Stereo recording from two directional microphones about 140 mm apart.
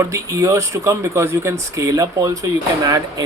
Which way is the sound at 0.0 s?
25° right (ahead or behind).